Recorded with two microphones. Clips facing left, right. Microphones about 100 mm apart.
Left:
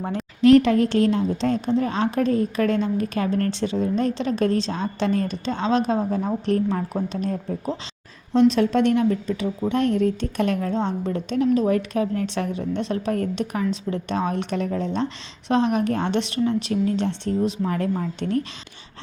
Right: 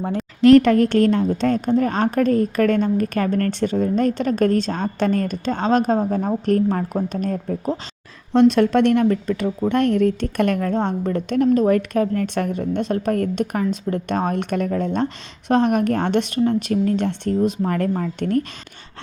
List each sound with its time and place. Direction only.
0.4 s a woman's voice: 70° right (ahead or behind); by 7.3 s 50° right (ahead or behind)
8.3 s a woman's voice: 60° right (ahead or behind)